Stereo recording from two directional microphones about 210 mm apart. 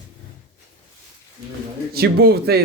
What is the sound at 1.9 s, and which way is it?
Speech, 50° right (ahead or behind).